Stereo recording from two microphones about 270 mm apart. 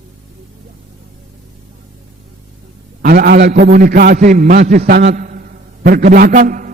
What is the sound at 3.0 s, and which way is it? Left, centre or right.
A man's voice, right.